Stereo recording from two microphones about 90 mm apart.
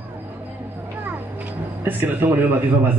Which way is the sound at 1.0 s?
20° right (ahead or behind).